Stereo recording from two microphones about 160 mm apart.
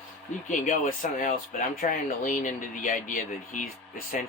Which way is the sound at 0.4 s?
55° left (ahead or behind).